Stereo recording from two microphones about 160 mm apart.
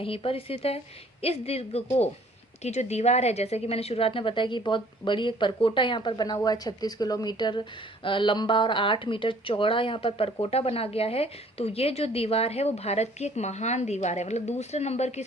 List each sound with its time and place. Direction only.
0.0 s a woman's voice: 35° left (ahead or behind)